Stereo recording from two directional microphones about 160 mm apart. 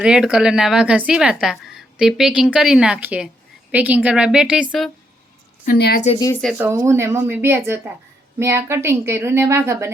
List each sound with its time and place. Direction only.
0.0 s a woman's voice: 5° right (ahead or behind)
5.6 s a woman's voice: 80° left
6.6 s a woman's voice: 15° right (ahead or behind)